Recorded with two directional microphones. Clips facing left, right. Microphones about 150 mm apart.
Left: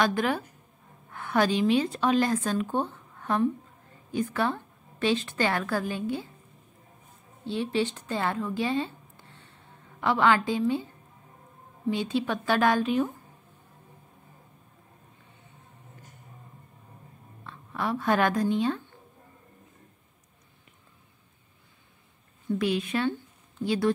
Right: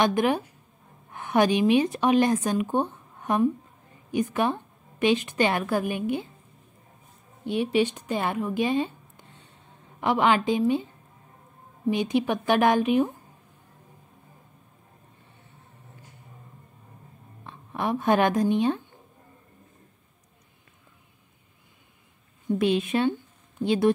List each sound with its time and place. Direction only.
0.0 s a woman's voice: 20° right (ahead or behind)
7.4 s speech: 15° right (ahead or behind)
11.9 s a woman's voice: 15° right (ahead or behind)
17.4 s a woman's voice: 20° right (ahead or behind)
22.5 s a woman's voice: 20° right (ahead or behind)